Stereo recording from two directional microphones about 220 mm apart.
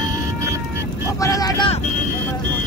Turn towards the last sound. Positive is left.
turn(degrees=20)  # may be behind; listen again after turning